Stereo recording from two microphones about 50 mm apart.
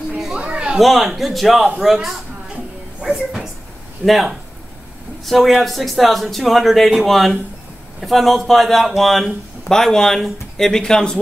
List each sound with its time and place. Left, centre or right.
0.4 s children playing: right
0.7 s speech: centre
4.0 s speech: centre